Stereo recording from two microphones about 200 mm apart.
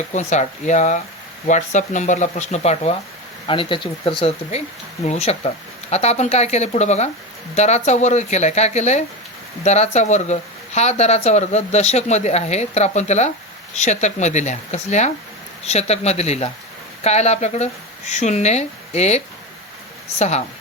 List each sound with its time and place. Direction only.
0.1 s speech: 35° left (ahead or behind)